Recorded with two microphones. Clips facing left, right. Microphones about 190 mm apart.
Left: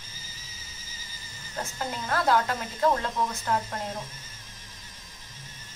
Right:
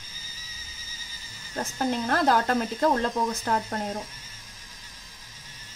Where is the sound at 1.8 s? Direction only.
40° right (ahead or behind).